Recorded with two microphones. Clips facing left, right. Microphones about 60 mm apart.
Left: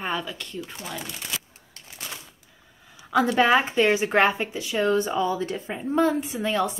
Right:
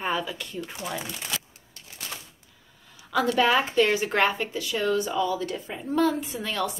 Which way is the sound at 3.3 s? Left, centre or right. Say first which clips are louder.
Left 1 dB; left.